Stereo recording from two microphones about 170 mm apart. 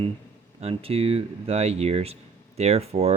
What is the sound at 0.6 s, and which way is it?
Speech, 35° right (ahead or behind).